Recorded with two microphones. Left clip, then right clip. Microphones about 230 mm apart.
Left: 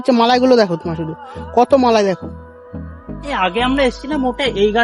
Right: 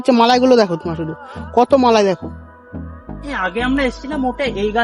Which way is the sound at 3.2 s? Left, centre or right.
Centre.